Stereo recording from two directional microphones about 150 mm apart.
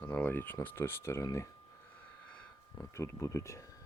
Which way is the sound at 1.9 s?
10° left (ahead or behind).